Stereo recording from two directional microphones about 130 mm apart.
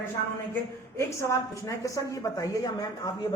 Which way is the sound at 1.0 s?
20° left (ahead or behind).